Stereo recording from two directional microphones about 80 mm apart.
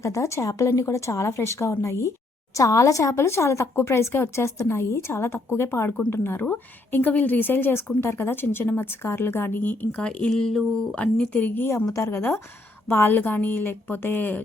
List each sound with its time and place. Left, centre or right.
0.0 s a woman's voice: left
11.9 s a woman's voice: left